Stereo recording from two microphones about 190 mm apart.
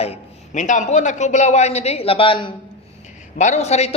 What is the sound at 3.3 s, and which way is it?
Speech, 40° left (ahead or behind).